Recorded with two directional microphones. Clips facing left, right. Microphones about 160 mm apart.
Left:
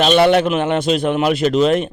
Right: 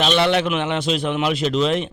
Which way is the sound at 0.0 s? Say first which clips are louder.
Left 6 dB; 50° left (ahead or behind).